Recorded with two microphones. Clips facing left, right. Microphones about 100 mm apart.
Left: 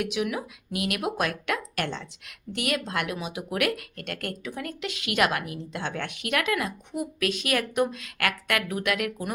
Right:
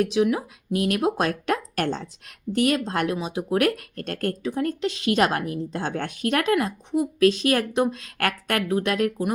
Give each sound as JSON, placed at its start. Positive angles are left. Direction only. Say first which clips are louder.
{"t": 0.0, "sound": "speech", "louder": "right 7 dB", "side_deg": -35}